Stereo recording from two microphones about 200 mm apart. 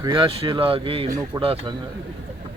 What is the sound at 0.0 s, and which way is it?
Speech, 25° right (ahead or behind).